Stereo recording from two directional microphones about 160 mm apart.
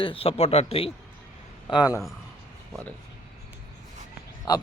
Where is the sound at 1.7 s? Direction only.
25° left (ahead or behind).